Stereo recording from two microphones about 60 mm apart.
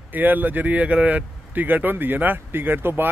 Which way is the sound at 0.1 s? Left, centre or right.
Right.